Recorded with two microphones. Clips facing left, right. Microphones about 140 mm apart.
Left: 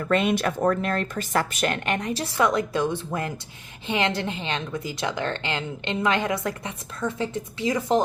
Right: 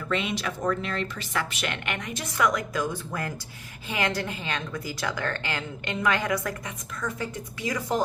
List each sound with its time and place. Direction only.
0.0 s a woman's voice: 50° left (ahead or behind); by 8.0 s 25° left (ahead or behind)